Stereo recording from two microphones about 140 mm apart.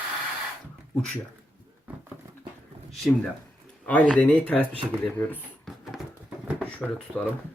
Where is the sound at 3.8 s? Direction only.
10° left (ahead or behind).